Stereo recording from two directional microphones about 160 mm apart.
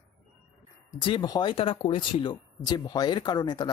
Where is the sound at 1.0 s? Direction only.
30° left (ahead or behind).